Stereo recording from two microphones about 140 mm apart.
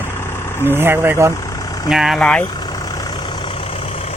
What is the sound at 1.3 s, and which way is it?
Vehicle, 25° left (ahead or behind).